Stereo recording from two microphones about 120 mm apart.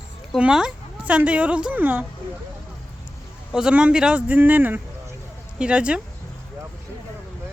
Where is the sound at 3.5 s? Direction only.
5° right (ahead or behind).